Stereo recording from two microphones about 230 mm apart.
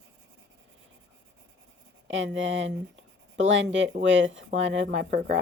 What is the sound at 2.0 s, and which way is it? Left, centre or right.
Speech, right.